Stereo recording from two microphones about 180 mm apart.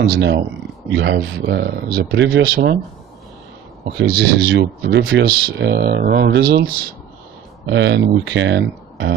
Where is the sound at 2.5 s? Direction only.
55° right (ahead or behind).